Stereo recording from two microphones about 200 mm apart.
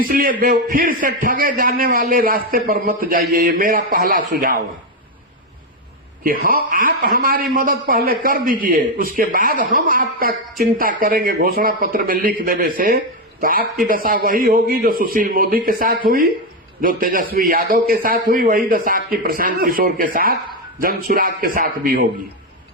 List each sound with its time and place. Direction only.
0.0 s a man's voice: 45° right (ahead or behind)
6.2 s a man's voice: 45° right (ahead or behind)